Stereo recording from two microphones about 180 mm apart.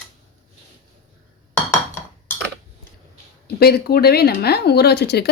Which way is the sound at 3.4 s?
60° left (ahead or behind).